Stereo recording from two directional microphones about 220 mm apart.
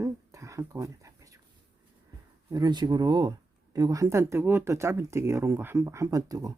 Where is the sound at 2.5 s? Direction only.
20° right (ahead or behind).